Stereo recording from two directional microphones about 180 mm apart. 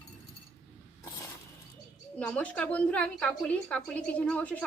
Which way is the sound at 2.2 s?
5° left (ahead or behind).